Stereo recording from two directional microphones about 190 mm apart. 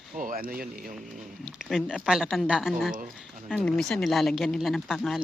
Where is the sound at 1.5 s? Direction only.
Centre (ahead or behind).